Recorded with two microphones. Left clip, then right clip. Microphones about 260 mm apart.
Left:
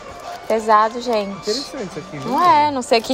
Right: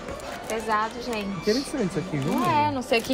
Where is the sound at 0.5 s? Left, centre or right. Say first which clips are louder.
Left 11 dB; centre.